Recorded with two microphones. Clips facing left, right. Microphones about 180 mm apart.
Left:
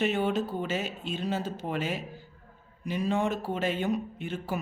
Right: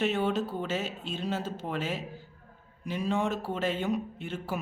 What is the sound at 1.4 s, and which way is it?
Speech, 15° left (ahead or behind).